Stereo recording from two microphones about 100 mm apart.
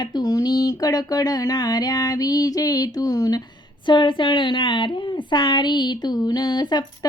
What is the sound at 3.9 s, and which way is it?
Speech, 55° left (ahead or behind).